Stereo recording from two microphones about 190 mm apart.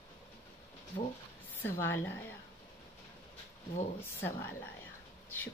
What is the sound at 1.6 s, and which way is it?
Speech, 10° left (ahead or behind).